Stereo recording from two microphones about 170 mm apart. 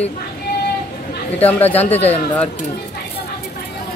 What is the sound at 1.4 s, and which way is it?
Speech, 10° left (ahead or behind).